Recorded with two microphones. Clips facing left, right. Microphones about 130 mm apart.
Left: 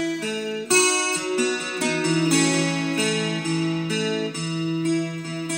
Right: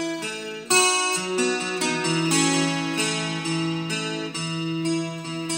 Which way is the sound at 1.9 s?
15° right (ahead or behind).